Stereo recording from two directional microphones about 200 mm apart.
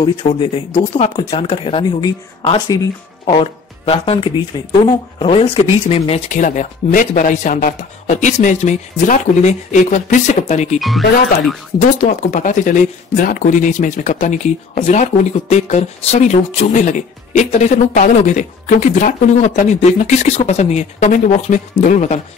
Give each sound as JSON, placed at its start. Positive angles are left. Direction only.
{"t": 0.0, "sound": "speech", "side_deg": 25}
{"t": 10.8, "sound": "speech", "side_deg": 0}
{"t": 12.0, "sound": "speech", "side_deg": 40}